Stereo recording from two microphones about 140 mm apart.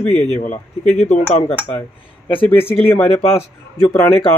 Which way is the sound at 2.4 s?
15° left (ahead or behind).